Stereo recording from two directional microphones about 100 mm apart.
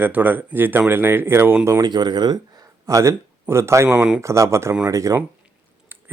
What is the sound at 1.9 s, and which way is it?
Speech, 45° right (ahead or behind).